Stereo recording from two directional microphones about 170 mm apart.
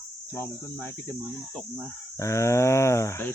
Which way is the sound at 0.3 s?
15° left (ahead or behind).